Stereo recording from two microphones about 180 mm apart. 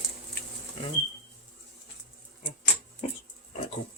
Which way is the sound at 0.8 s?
30° left (ahead or behind).